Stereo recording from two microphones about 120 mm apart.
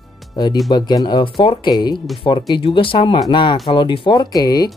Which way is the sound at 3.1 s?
35° left (ahead or behind).